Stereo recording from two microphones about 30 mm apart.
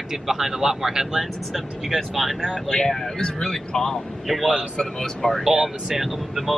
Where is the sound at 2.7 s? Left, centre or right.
Centre.